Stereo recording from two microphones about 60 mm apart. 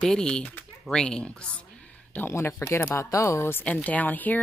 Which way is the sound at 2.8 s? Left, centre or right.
Left.